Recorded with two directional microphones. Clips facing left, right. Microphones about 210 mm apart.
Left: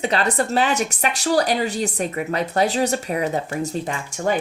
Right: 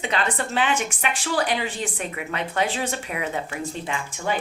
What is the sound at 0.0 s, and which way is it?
A woman's voice, 40° left (ahead or behind).